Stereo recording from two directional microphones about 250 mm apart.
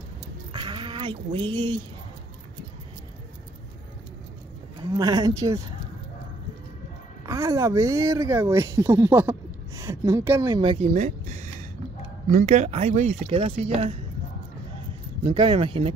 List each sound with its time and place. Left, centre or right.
0.5 s bleat: centre
4.8 s speech: centre
7.2 s speech: centre
10.9 s a sound: right
12.3 s speech: right
15.2 s speech: centre